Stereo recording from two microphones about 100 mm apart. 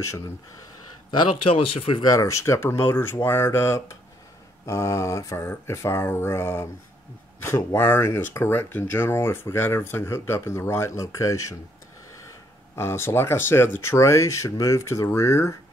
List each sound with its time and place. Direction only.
1.4 s speech: 65° left (ahead or behind)
2.0 s speech: 35° left (ahead or behind)
12.7 s speech: 25° left (ahead or behind)